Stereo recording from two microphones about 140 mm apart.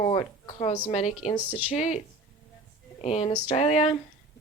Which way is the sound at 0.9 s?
50° left (ahead or behind).